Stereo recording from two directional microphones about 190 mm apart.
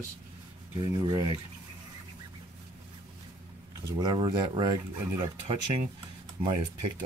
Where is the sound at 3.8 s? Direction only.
20° right (ahead or behind).